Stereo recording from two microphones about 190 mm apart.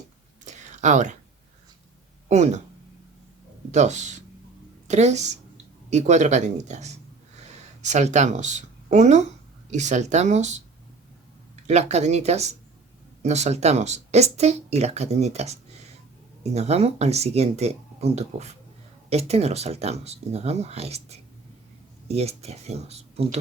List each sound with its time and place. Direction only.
0.4 s a sound: 40° right (ahead or behind)
2.3 s speech: 35° right (ahead or behind)
3.7 s speech: 40° right (ahead or behind)
11.7 s speech: 35° right (ahead or behind)